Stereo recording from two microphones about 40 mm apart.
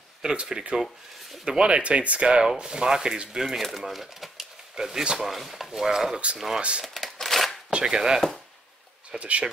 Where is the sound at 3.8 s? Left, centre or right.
Centre.